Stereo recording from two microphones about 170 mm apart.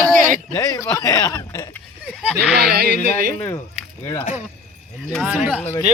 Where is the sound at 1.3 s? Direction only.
15° left (ahead or behind).